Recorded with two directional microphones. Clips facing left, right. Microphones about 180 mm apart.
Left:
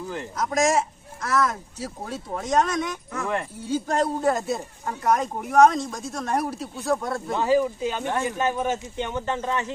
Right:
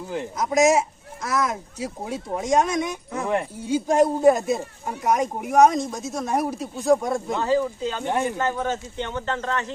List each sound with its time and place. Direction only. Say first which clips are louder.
0.1 s speech: right 4 dB; 15° right (ahead or behind)
7.3 s a man's voice: left 3 dB; 15° left (ahead or behind)
8.0 s speech: right 4 dB; 20° right (ahead or behind)
8.3 s a man's voice: even; 15° left (ahead or behind)